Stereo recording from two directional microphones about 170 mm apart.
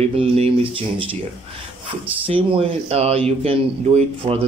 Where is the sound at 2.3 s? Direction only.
35° right (ahead or behind).